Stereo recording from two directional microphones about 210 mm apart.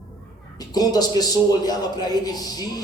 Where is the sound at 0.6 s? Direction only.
20° left (ahead or behind).